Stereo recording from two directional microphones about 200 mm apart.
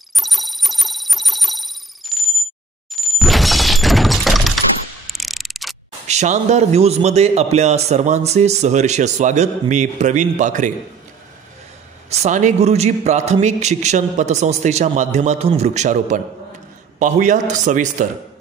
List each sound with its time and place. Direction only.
0.1 s telephone bell ringing: centre (ahead or behind)
2.9 s breaking: centre (ahead or behind)
5.0 s mechanisms: centre (ahead or behind)
6.0 s a man's voice: 35° right (ahead or behind)
12.1 s a man's voice: 35° right (ahead or behind)